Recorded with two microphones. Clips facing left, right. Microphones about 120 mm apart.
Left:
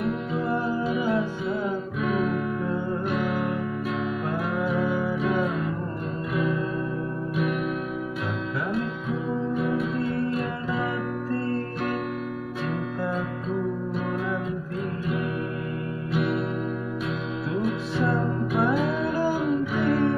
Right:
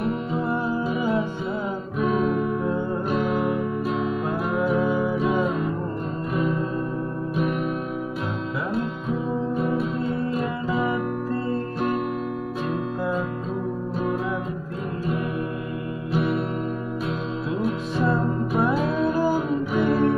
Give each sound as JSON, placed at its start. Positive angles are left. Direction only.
{"t": 2.0, "sound": "music", "side_deg": -30}
{"t": 4.6, "sound": "music", "side_deg": -20}
{"t": 6.3, "sound": "music", "side_deg": -40}
{"t": 16.1, "sound": "music", "side_deg": -30}
{"t": 19.1, "sound": "music", "side_deg": -15}